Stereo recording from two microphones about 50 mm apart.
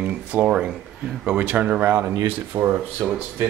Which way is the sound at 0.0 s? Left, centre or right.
Right.